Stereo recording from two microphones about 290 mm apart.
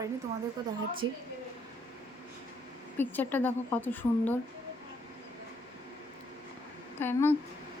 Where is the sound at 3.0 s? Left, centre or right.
Centre.